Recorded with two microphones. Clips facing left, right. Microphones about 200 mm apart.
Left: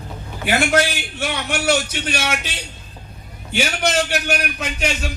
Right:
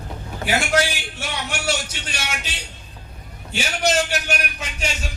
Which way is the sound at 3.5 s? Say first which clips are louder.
Left 1 dB; 60° left (ahead or behind).